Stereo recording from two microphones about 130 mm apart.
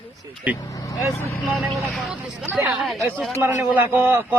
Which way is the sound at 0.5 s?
30° left (ahead or behind).